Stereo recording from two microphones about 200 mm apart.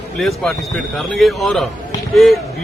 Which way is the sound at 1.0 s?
Centre (ahead or behind).